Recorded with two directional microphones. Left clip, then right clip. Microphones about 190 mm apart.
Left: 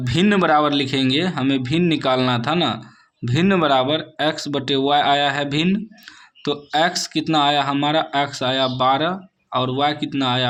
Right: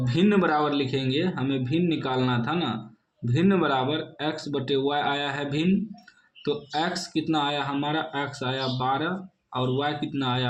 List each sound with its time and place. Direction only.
0.0 s speech: 40° left (ahead or behind)